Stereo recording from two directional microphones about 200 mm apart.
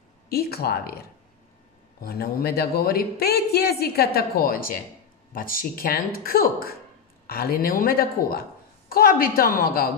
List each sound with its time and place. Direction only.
0.3 s a man's voice: 50° left (ahead or behind)